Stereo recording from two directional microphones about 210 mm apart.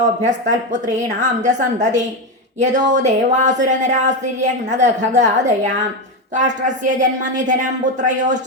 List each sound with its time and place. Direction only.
0.0 s speech: 35° right (ahead or behind)